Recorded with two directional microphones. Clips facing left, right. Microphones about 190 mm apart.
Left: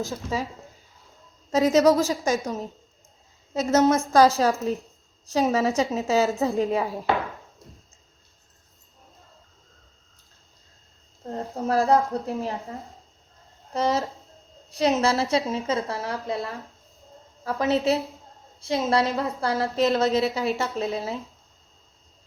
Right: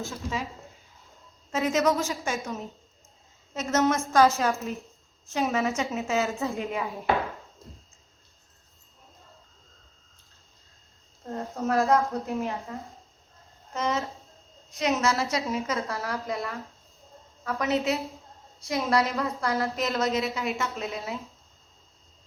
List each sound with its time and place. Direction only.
0.0 s a woman's voice: 40° left (ahead or behind)
1.5 s a woman's voice: 40° left (ahead or behind)
11.3 s a woman's voice: 30° left (ahead or behind)
13.7 s a woman's voice: 35° left (ahead or behind)